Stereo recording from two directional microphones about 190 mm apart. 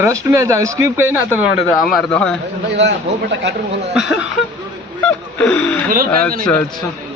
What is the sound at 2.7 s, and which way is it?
Speech, 65° right (ahead or behind).